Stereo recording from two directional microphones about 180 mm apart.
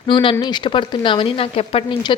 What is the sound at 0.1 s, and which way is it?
A woman's voice, 25° left (ahead or behind).